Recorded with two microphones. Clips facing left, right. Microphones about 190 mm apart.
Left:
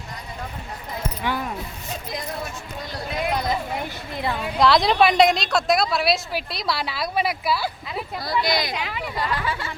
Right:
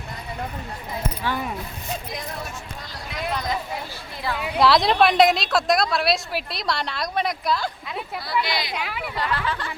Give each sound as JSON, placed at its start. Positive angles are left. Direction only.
{"t": 1.2, "sound": "speech", "side_deg": 15}
{"t": 3.8, "sound": "speech", "side_deg": 20}
{"t": 4.5, "sound": "a woman's voice", "side_deg": 0}
{"t": 8.2, "sound": "speech", "side_deg": 40}
{"t": 8.7, "sound": "a woman's voice", "side_deg": 0}
{"t": 9.1, "sound": "speech", "side_deg": 10}